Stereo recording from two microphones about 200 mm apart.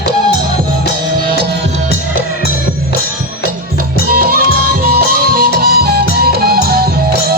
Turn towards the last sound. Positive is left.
turn(degrees=-50)  # may be behind; listen again after turning